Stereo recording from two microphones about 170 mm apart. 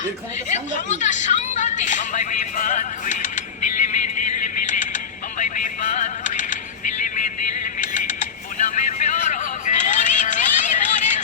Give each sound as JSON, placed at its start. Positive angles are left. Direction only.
{"t": 0.4, "sound": "a woman's voice", "side_deg": 45}
{"t": 5.4, "sound": "music", "side_deg": 45}